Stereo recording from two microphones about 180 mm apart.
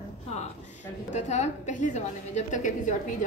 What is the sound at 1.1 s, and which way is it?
A woman's voice, 40° left (ahead or behind).